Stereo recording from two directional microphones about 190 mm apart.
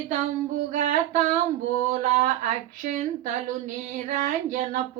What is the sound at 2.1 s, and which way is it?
Speech, 40° right (ahead or behind).